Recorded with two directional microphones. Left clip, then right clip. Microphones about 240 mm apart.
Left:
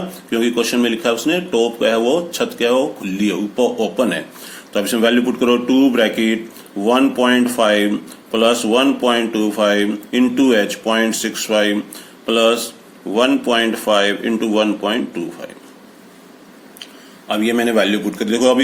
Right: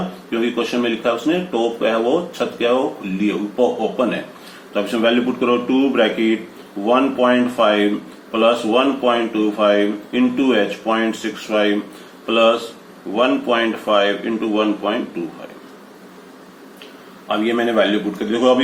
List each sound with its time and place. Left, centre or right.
0.3 s speech: left
17.2 s speech: left